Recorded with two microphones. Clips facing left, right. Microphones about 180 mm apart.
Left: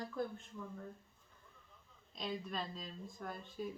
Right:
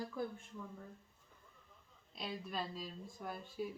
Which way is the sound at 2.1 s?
5° right (ahead or behind).